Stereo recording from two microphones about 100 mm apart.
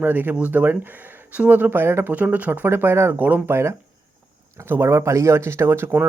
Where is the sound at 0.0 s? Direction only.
20° right (ahead or behind).